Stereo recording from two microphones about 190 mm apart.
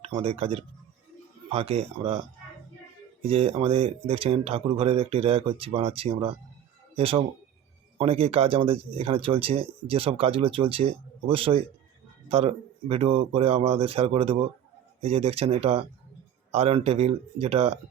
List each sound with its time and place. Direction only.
0.0 s speech: 30° right (ahead or behind)
3.2 s speech: 30° right (ahead or behind)